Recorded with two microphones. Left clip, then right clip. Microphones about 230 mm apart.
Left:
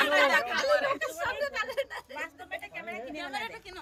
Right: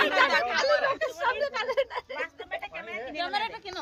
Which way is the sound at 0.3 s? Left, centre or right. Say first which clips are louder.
Right 1 dB; centre.